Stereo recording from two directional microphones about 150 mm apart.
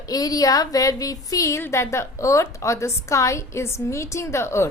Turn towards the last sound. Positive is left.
turn(degrees=20)  # may be behind; listen again after turning